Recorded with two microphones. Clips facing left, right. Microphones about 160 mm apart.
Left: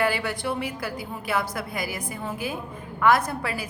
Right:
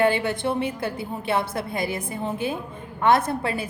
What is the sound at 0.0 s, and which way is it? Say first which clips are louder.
A woman's voice: right 4 dB; 25° right (ahead or behind).